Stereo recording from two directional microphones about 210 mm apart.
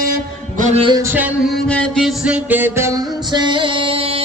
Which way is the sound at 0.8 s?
15° right (ahead or behind).